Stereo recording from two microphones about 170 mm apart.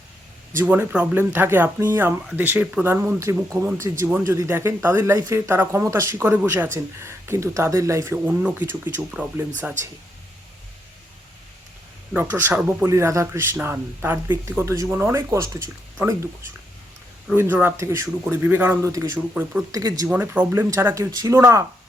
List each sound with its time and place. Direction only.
0.5 s speech: 10° right (ahead or behind)
12.1 s speech: 10° right (ahead or behind)
17.3 s speech: 15° right (ahead or behind)
19.3 s speech: 5° right (ahead or behind)
19.7 s speech: 20° right (ahead or behind)
20.1 s speech: 10° right (ahead or behind)